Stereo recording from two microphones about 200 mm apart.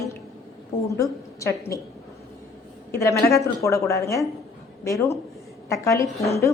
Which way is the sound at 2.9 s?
15° left (ahead or behind).